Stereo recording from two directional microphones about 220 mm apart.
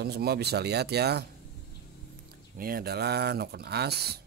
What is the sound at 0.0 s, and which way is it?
Speech, 45° right (ahead or behind).